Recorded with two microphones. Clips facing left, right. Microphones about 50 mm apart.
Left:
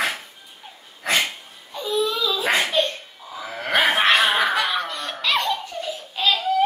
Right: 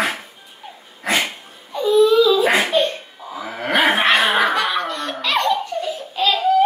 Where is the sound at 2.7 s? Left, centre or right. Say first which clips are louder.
Right 4 dB; centre.